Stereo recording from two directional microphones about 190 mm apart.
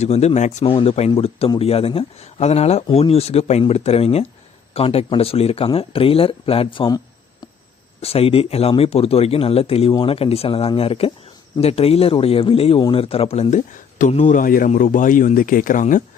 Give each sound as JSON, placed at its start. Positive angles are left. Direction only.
{"t": 0.0, "sound": "speech", "side_deg": 35}
{"t": 8.0, "sound": "speech", "side_deg": 30}